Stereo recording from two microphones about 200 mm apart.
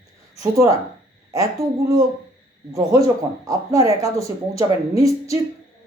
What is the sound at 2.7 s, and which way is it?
Speech, 15° right (ahead or behind).